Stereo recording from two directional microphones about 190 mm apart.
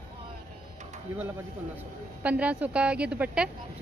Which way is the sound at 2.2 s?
5° right (ahead or behind).